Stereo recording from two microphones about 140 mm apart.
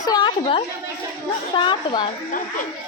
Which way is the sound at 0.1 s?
30° left (ahead or behind).